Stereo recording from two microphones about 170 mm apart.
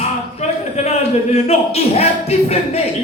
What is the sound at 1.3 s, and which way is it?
Speech, 40° left (ahead or behind).